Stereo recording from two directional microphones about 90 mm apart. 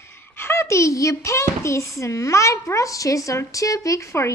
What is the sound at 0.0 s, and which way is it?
A child's voice, 25° left (ahead or behind).